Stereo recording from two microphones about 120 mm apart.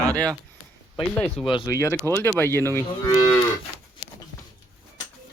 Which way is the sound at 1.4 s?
Centre (ahead or behind).